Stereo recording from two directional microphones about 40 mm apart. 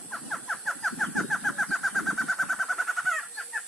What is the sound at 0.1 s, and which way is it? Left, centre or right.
Squeal, centre.